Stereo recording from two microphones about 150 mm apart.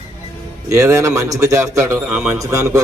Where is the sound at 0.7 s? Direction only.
20° right (ahead or behind).